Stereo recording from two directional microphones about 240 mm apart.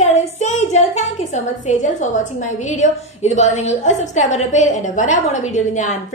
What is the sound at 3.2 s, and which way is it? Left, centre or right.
A woman's voice, left.